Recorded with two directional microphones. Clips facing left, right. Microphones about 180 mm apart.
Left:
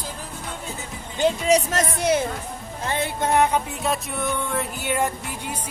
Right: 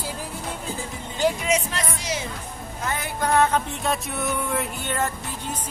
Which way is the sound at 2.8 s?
30° left (ahead or behind).